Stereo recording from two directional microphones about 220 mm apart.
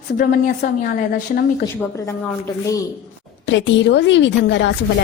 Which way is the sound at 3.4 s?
55° left (ahead or behind).